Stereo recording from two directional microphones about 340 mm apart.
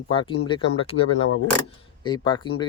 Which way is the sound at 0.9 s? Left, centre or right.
Left.